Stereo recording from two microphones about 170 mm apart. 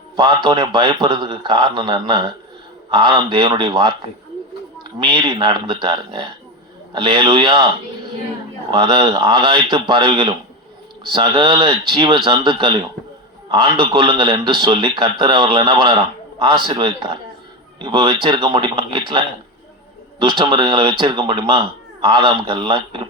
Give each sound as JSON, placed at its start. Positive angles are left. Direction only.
{"t": 0.2, "sound": "a man's voice", "side_deg": -25}
{"t": 8.7, "sound": "a man's voice", "side_deg": -25}